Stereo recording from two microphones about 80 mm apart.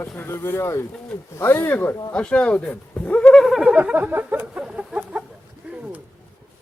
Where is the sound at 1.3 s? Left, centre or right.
Left.